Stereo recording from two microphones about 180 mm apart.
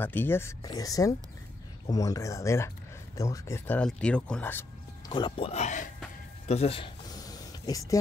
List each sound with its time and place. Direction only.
0.0 s speech: 10° left (ahead or behind)
5.0 s speech: 25° left (ahead or behind); by 5.9 s 40° left (ahead or behind)
6.4 s a sound: 35° left (ahead or behind); by 8.0 s 20° left (ahead or behind)